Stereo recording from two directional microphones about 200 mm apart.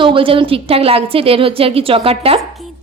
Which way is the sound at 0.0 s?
25° right (ahead or behind).